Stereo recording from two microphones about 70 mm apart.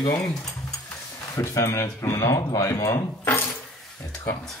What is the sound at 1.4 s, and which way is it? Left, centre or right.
A man's voice, left.